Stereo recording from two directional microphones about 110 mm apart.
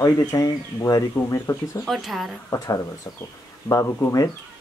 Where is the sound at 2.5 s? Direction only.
30° left (ahead or behind).